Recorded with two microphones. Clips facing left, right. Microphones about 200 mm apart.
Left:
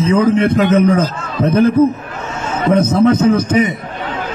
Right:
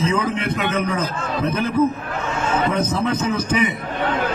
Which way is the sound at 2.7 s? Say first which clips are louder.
Left 9 dB; 45° left (ahead or behind).